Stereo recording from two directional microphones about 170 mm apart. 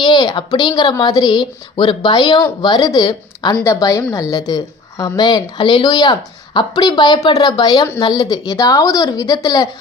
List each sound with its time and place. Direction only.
0.0 s a woman's voice: 25° left (ahead or behind)